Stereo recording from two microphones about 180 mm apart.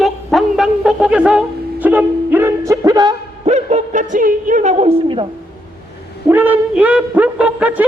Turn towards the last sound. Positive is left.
turn(degrees=-5)  # may be behind; listen again after turning